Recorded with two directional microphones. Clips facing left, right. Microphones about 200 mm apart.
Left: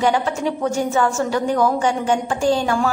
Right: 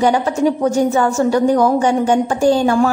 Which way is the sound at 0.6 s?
40° right (ahead or behind).